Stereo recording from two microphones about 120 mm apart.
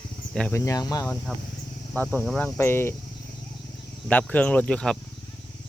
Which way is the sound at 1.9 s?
10° left (ahead or behind).